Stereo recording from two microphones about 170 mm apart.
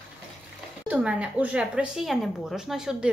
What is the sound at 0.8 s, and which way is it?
Speech, 5° right (ahead or behind).